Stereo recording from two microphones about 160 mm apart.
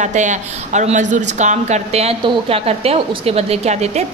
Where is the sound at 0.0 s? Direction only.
50° right (ahead or behind).